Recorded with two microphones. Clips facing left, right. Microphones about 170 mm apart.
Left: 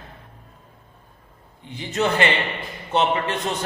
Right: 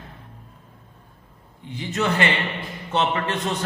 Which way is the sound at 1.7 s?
25° left (ahead or behind).